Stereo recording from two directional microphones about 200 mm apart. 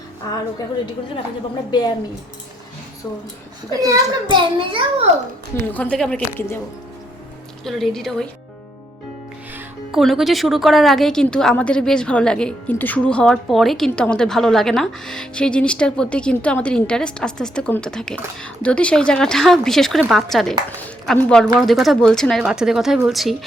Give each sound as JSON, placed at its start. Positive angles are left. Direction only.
{"t": 1.7, "sound": "speech", "side_deg": 20}
{"t": 3.8, "sound": "a child's voice", "side_deg": -20}
{"t": 5.7, "sound": "a woman's voice", "side_deg": 5}
{"t": 7.6, "sound": "a woman's voice", "side_deg": 0}
{"t": 9.9, "sound": "a woman's voice", "side_deg": 0}